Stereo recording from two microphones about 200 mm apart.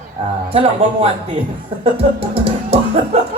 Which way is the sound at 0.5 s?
30° right (ahead or behind).